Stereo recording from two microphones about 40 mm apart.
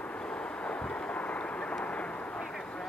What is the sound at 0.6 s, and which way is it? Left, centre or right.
Vehicle, left.